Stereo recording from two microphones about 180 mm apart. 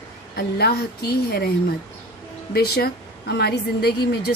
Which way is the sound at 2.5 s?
60° left (ahead or behind).